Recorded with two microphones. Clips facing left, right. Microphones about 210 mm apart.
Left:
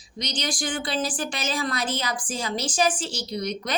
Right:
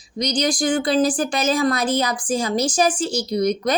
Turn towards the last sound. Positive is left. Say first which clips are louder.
# right 9 dB
turn(degrees=-40)  # may be behind; listen again after turning